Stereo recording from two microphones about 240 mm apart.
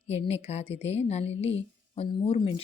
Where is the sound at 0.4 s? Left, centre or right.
Left.